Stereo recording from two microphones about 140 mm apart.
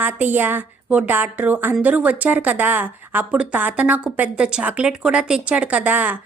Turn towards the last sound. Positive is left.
turn(degrees=-10)  # may be behind; listen again after turning